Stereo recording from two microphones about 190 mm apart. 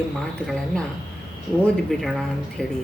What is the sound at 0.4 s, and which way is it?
Speech, 5° left (ahead or behind).